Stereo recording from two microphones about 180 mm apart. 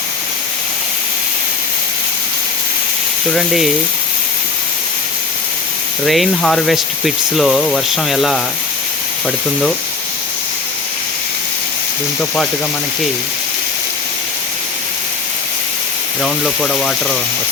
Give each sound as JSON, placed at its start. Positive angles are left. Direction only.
{"t": 3.3, "sound": "speech", "side_deg": 0}
{"t": 6.1, "sound": "speech", "side_deg": 0}
{"t": 16.2, "sound": "speech", "side_deg": 0}